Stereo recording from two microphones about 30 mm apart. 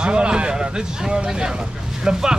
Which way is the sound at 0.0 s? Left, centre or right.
Right.